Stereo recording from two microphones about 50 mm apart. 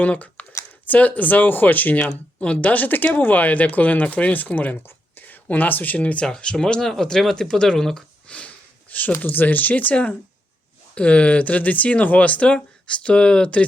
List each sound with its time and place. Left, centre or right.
0.0 s speech: left
2.0 s speech: left
6.2 s speech: centre
8.3 s sniff: left
9.2 s speech: left
12.5 s speech: centre